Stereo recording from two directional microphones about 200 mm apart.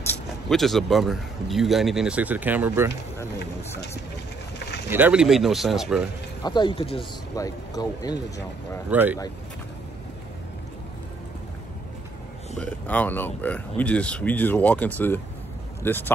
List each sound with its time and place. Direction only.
0.0 s speech: 5° left (ahead or behind); by 2.9 s 10° right (ahead or behind)
4.8 s speech: 10° right (ahead or behind)
6.4 s speech: 20° left (ahead or behind)
8.9 s speech: 10° right (ahead or behind)
12.5 s speech: 5° left (ahead or behind)